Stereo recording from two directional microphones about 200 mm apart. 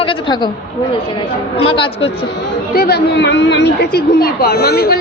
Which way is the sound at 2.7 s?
55° left (ahead or behind).